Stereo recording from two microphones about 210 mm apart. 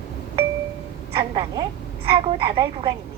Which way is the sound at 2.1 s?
25° right (ahead or behind).